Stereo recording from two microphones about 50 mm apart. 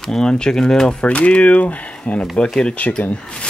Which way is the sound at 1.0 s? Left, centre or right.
Left.